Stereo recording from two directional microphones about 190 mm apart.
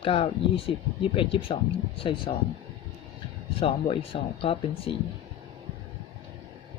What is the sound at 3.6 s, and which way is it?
Speech, 30° left (ahead or behind).